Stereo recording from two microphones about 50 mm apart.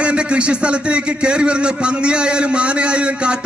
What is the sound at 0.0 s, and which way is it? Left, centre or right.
A man's voice, right.